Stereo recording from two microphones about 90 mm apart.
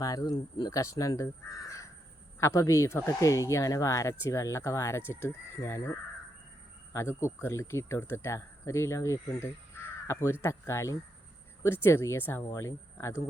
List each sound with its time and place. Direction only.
0.0 s speech: 40° left (ahead or behind)
6.9 s speech: 30° left (ahead or behind)